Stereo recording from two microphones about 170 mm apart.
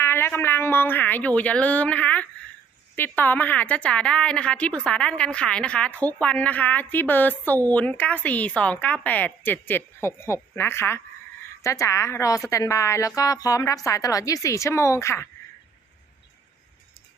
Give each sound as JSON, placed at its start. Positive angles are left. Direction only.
{"t": 0.0, "sound": "a woman's voice", "side_deg": 15}